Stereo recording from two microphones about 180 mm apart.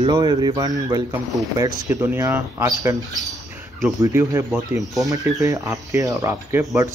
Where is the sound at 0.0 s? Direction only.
25° right (ahead or behind).